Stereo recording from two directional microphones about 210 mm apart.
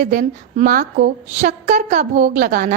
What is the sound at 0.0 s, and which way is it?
A woman's voice, 40° right (ahead or behind).